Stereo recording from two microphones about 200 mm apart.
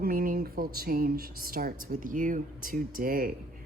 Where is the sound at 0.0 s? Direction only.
45° right (ahead or behind).